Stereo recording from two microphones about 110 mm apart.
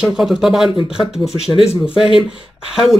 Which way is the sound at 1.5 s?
65° left (ahead or behind).